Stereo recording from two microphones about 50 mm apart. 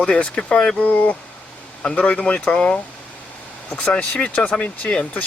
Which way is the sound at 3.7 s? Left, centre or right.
Left.